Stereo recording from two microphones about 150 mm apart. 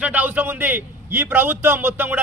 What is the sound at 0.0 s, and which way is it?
A man's voice, 10° right (ahead or behind).